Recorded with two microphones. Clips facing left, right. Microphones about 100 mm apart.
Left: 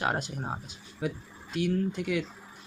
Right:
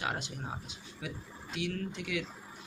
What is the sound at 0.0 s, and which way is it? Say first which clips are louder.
Speech: left 6 dB; 45° left (ahead or behind).